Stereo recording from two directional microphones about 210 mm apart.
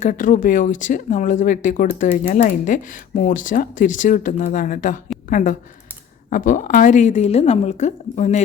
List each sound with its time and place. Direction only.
0.0 s speech: 40° left (ahead or behind)